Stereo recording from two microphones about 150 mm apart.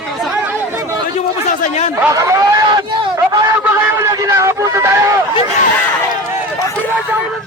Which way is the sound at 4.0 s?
20° right (ahead or behind).